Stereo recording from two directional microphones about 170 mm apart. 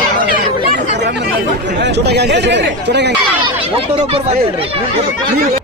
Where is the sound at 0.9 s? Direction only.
85° right.